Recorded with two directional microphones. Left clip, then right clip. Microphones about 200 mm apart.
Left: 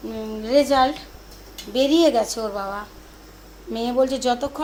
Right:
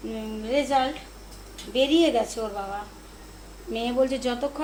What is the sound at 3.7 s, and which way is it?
Speech, 20° left (ahead or behind).